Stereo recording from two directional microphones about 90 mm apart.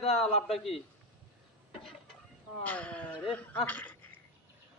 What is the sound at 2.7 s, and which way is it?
Speech, 15° left (ahead or behind).